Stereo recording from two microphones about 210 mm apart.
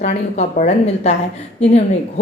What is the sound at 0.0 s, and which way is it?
A woman's voice, 35° left (ahead or behind).